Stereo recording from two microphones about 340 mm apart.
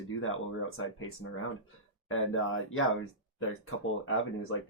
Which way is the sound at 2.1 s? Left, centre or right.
Left.